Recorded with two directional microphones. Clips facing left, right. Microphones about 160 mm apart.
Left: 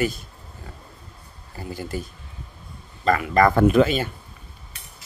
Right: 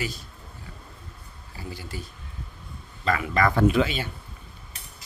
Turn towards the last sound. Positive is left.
turn(degrees=45)  # may be behind; listen again after turning